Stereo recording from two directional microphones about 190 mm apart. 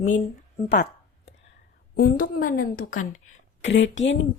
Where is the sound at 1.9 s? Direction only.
50° left (ahead or behind).